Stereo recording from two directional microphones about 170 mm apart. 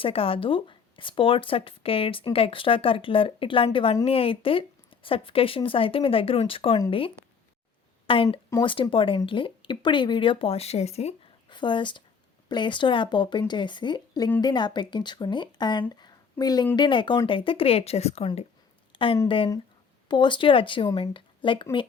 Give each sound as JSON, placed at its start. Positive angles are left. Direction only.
{"t": 0.0, "sound": "speech", "side_deg": 35}
{"t": 8.0, "sound": "speech", "side_deg": 30}